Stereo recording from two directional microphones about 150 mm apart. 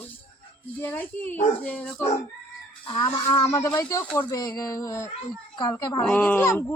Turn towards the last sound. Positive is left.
turn(degrees=15)  # may be behind; listen again after turning